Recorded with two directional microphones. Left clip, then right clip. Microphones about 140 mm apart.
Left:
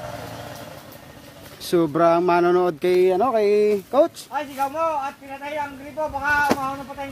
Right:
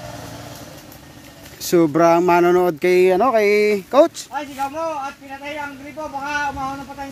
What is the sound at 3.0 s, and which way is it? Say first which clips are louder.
Speech: right 4 dB; 35° right (ahead or behind).